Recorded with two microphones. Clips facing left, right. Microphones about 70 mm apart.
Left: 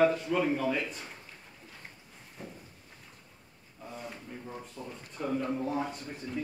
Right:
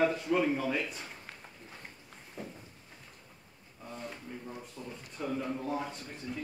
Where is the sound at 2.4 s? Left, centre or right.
Centre.